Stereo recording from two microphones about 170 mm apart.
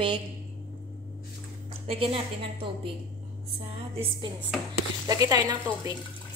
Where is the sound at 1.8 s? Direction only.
35° right (ahead or behind).